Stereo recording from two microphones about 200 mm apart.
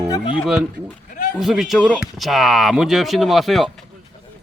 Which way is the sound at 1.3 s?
Centre (ahead or behind).